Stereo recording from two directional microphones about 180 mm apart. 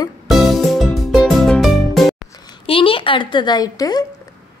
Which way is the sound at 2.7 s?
30° left (ahead or behind).